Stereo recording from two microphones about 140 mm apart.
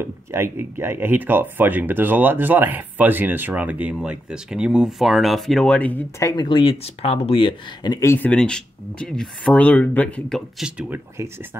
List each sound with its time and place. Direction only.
0.0 s speech: 15° right (ahead or behind); by 6.2 s 10° left (ahead or behind)
6.2 s speech: 30° left (ahead or behind)
8.3 s speech: 5° left (ahead or behind)
10.6 s speech: 5° right (ahead or behind)
11.2 s speech: 20° right (ahead or behind)